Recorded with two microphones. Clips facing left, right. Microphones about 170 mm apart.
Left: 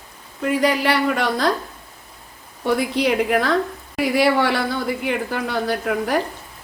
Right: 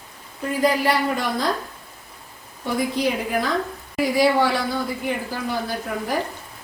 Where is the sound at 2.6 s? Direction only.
70° left (ahead or behind).